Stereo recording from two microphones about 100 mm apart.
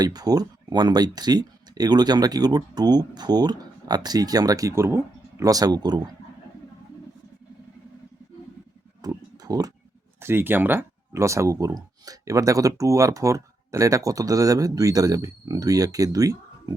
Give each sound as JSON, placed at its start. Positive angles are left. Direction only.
{"t": 0.0, "sound": "speech", "side_deg": -40}
{"t": 5.4, "sound": "speech", "side_deg": -35}
{"t": 9.0, "sound": "a sound", "side_deg": -40}
{"t": 10.2, "sound": "speech", "side_deg": -25}